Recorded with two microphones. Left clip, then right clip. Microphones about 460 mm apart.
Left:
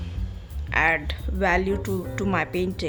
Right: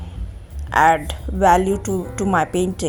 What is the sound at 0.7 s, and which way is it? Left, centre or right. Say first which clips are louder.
Speech: right 7 dB; left.